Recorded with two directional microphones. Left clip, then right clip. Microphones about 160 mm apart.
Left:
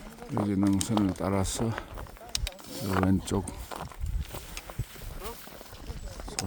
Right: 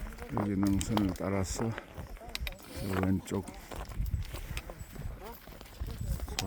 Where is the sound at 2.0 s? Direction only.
75° left (ahead or behind).